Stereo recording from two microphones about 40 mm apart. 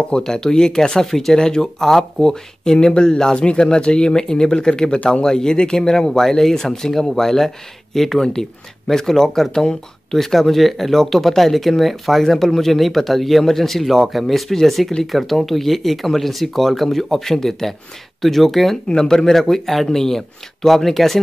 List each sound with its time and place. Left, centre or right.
0.1 s speech: centre